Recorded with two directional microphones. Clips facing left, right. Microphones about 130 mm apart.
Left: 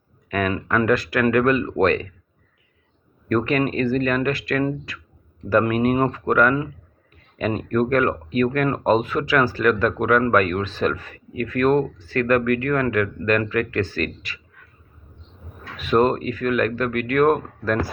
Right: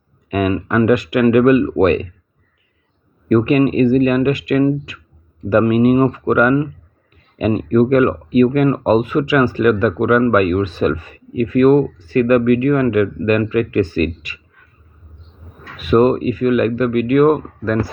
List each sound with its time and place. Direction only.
0.3 s speech: 10° right (ahead or behind)
3.2 s speech: 10° right (ahead or behind)
15.7 s speech: 5° right (ahead or behind)